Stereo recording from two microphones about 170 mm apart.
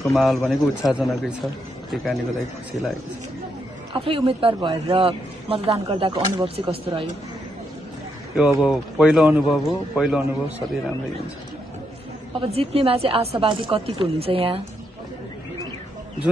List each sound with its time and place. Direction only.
0.1 s a man's voice: centre (ahead or behind)
3.9 s a man's voice: 30° right (ahead or behind)
8.4 s a man's voice: 5° right (ahead or behind)
12.4 s a man's voice: 35° right (ahead or behind)